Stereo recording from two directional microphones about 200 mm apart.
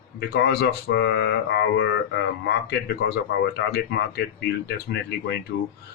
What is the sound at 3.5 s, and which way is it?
Speech, 55° left (ahead or behind).